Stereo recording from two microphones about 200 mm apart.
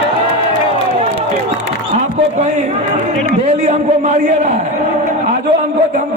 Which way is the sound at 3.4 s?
35° right (ahead or behind).